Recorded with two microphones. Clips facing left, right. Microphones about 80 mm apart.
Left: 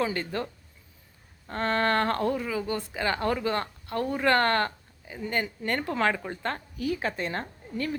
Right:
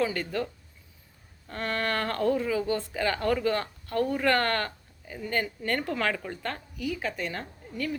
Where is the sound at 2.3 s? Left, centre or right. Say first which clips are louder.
Right 3 dB; centre.